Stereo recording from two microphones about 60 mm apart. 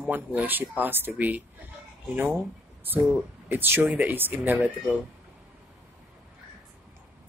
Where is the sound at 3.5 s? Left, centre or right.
Right.